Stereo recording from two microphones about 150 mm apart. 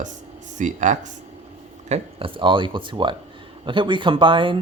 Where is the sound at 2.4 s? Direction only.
35° right (ahead or behind).